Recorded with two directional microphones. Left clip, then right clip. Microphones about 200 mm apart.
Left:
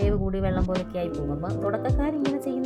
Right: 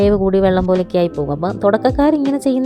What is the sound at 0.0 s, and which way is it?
Speech, 30° right (ahead or behind).